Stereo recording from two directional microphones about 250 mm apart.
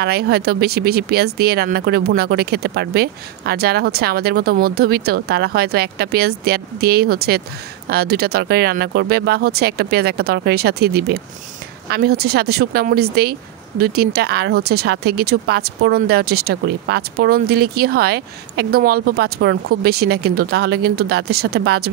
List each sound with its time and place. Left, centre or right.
0.0 s speech: right